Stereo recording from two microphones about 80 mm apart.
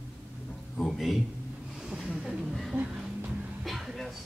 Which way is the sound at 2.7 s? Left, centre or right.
Centre.